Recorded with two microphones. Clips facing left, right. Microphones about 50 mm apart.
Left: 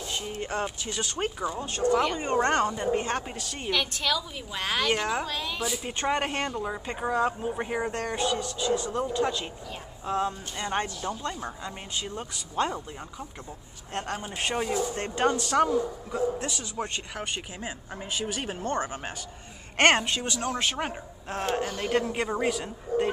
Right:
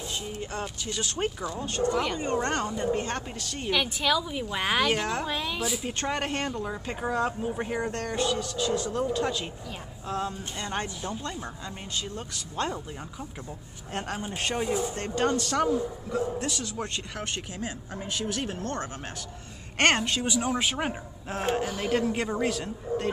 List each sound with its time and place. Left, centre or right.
0.1 s speech: left
1.0 s speech: centre
2.1 s a woman's voice: left
2.6 s a man's voice: centre
3.7 s a woman's voice: centre
5.2 s a man's voice: centre
12.0 s a man's voice: centre
14.3 s a man's voice: centre
14.7 s speech: right
15.0 s a man's voice: centre
15.4 s a man's voice: centre
20.2 s a woman's voice: centre